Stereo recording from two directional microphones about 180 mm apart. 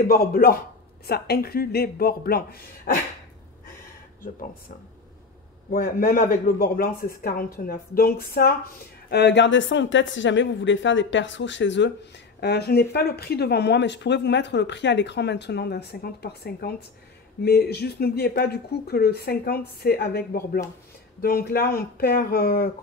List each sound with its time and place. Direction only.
0.0 s speech: 55° left (ahead or behind)
5.7 s speech: 55° left (ahead or behind)
9.1 s speech: 70° left (ahead or behind); by 11.9 s 85° left
12.4 s speech: 65° left (ahead or behind)